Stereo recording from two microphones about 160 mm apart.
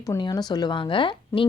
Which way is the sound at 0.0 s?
25° left (ahead or behind).